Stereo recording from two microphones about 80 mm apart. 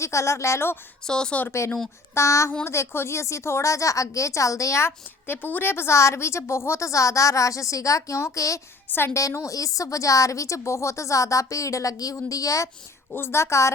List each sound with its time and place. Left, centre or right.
0.0 s a woman's voice: left
1.0 s speech: centre
1.6 s a woman's voice: left
4.9 s a woman's voice: left
8.9 s a woman's voice: left
9.1 s a woman's voice: left
13.1 s a woman's voice: left